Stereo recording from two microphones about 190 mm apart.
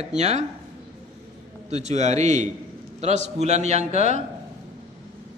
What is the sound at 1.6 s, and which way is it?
A man's voice, 35° right (ahead or behind).